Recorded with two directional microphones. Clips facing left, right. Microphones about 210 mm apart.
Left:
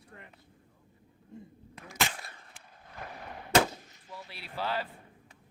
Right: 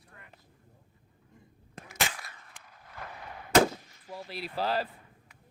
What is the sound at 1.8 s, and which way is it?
Cap gun, 45° right (ahead or behind).